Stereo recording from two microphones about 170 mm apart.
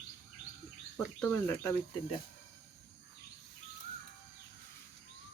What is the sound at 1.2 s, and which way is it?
Speech, 10° left (ahead or behind).